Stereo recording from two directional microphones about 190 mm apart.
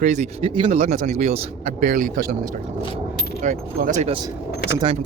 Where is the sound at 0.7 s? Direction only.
40° right (ahead or behind).